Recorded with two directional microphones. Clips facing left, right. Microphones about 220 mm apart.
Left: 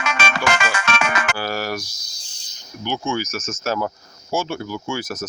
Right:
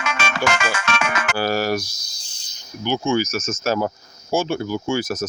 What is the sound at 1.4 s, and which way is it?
Speech, 35° right (ahead or behind).